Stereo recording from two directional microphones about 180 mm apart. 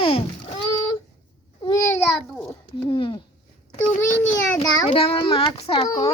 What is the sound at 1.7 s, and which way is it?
Speech, 10° left (ahead or behind).